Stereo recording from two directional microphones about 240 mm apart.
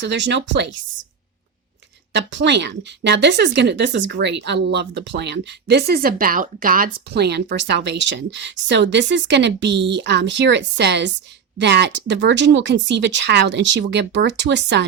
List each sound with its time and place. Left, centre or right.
0.0 s speech: right
2.1 s speech: right